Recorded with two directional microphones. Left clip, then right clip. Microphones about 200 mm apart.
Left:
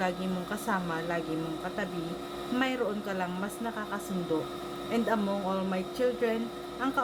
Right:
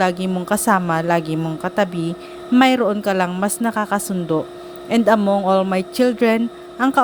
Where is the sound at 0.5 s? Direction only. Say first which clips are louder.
Right 16 dB; 50° right (ahead or behind).